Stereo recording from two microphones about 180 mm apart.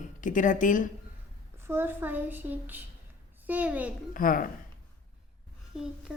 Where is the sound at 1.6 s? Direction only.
15° right (ahead or behind).